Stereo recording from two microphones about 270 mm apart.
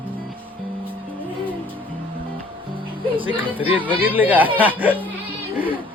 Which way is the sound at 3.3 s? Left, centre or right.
Centre.